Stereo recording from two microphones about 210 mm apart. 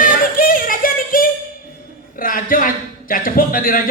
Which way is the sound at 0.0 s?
40° left (ahead or behind).